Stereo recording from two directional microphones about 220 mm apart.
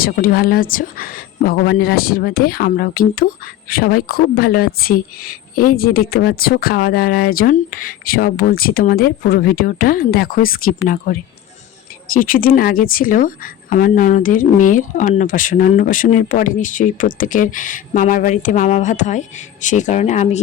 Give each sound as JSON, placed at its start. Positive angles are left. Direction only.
{"t": 0.0, "sound": "speech", "side_deg": 40}